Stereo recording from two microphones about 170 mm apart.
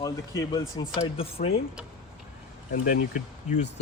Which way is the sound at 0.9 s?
35° left (ahead or behind).